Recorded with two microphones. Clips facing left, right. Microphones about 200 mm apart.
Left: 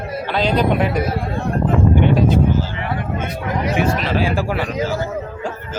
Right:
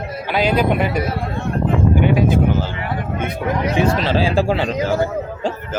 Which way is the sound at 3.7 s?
30° right (ahead or behind).